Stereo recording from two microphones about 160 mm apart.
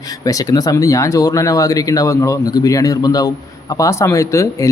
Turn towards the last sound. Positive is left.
turn(degrees=20)  # may be behind; listen again after turning